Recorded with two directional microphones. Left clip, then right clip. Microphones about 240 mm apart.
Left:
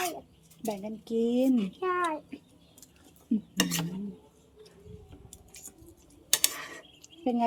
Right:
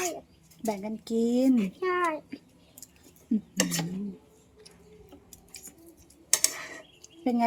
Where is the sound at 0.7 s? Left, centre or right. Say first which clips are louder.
Right 2 dB; right.